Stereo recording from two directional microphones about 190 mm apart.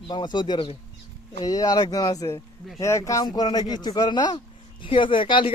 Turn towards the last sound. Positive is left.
turn(degrees=25)  # may be behind; listen again after turning